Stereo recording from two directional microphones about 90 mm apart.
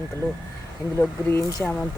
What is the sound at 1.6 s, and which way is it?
Speech, 10° left (ahead or behind).